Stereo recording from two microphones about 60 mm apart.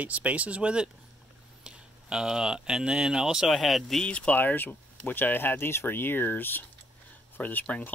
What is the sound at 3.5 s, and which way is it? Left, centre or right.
Speech, centre.